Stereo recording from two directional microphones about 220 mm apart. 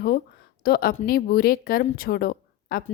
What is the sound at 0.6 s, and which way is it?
A woman's voice, 40° left (ahead or behind).